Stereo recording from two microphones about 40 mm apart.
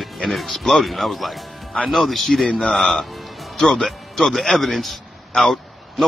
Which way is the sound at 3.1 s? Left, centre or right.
Centre.